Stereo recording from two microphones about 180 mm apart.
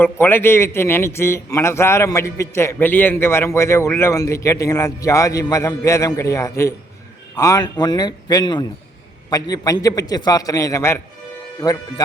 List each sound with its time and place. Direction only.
0.0 s a man's voice: 10° left (ahead or behind)